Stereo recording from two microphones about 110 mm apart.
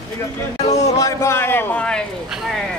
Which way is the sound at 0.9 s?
25° left (ahead or behind).